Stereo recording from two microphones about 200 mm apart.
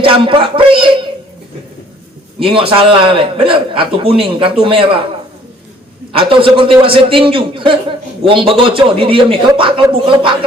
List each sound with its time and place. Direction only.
0.0 s speech: 25° right (ahead or behind)
2.4 s a man's voice: 25° right (ahead or behind)
6.1 s a man's voice: 25° right (ahead or behind)